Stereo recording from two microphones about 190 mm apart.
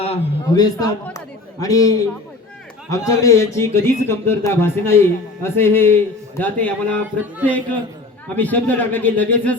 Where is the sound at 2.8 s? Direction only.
15° left (ahead or behind).